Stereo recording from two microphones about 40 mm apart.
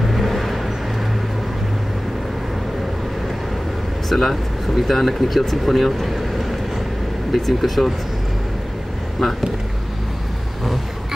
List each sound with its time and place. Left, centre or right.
0.0 s vehicle: centre
4.1 s speech: centre